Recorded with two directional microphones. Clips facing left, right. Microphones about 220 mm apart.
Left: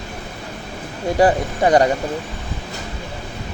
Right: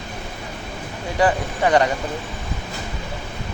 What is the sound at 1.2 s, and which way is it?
Speech, 35° left (ahead or behind).